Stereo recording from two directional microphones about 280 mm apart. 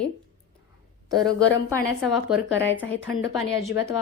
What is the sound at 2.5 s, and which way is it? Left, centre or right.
Speech, left.